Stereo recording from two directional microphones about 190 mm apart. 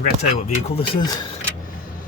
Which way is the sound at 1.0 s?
20° left (ahead or behind).